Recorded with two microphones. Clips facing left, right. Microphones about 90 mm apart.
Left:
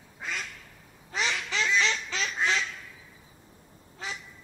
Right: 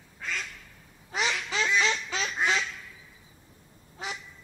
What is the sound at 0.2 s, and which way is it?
Quack, 5° left (ahead or behind).